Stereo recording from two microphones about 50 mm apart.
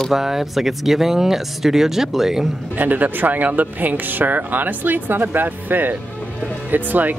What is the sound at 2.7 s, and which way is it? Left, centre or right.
Speech, right.